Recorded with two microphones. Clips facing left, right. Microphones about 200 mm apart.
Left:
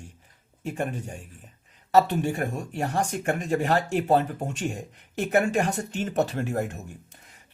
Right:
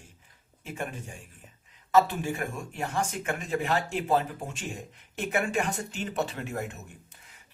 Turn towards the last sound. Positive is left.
turn(degrees=40)  # may be behind; listen again after turning